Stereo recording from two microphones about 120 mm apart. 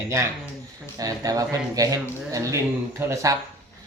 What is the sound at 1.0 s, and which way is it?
Speech, 30° right (ahead or behind).